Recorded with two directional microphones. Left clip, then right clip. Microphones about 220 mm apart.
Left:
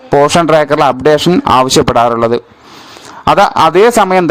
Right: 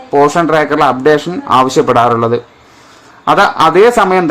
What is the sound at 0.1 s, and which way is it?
A man's voice, 45° left (ahead or behind).